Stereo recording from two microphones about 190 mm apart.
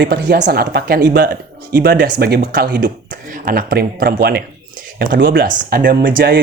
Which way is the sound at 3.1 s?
45° right (ahead or behind).